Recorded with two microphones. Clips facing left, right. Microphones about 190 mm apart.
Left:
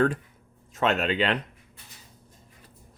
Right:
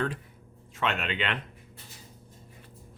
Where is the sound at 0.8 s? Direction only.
40° left (ahead or behind).